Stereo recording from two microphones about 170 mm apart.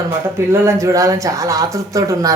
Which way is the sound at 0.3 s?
15° right (ahead or behind).